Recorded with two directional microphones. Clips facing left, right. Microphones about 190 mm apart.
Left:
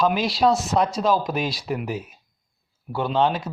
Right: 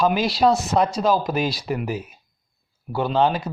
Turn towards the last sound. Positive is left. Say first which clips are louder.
# right 1 dB
turn(degrees=0)  # may be behind; listen again after turning